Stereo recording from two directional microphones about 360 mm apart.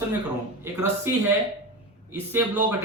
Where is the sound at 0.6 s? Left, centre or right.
Centre.